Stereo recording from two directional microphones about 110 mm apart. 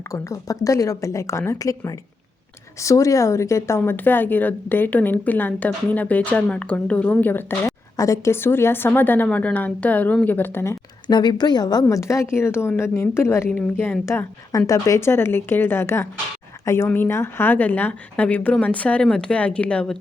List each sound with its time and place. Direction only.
0.1 s a woman's voice: 30° left (ahead or behind)
7.9 s a woman's voice: 30° left (ahead or behind)
11.0 s a woman's voice: 40° left (ahead or behind); by 20.0 s 10° left (ahead or behind)